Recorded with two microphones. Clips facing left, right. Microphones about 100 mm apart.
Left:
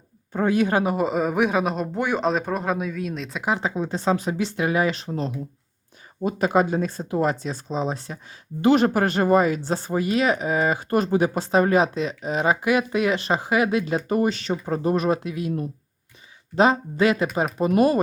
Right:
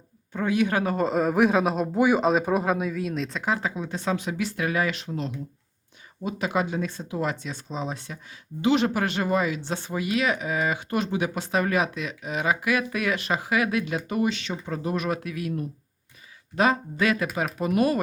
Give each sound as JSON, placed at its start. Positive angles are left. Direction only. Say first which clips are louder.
{"t": 0.3, "sound": "speech", "louder": "left 3 dB", "side_deg": 40}
{"t": 0.7, "sound": "speech", "louder": "left 4 dB", "side_deg": 25}
{"t": 0.9, "sound": "a man's voice", "louder": "even", "side_deg": 5}
{"t": 3.4, "sound": "speech", "louder": "left 3 dB", "side_deg": 20}
{"t": 3.8, "sound": "speech", "louder": "left 5 dB", "side_deg": 30}
{"t": 15.2, "sound": "speech", "louder": "left 3 dB", "side_deg": 25}